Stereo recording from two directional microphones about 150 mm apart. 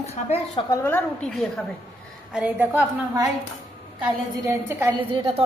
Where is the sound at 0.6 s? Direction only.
20° left (ahead or behind).